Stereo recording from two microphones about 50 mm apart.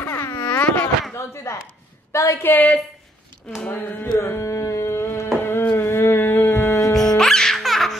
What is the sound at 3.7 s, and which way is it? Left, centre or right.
Carnatic music, left.